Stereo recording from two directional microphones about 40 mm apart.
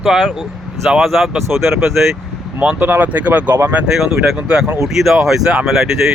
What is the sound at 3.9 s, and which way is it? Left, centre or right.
Speech, centre.